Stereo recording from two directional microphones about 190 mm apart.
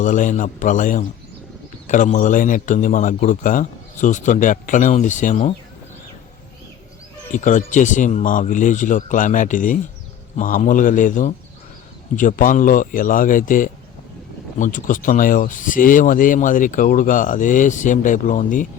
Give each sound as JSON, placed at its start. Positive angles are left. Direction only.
{"t": 0.0, "sound": "a man's voice", "side_deg": 40}
{"t": 7.3, "sound": "speech", "side_deg": 40}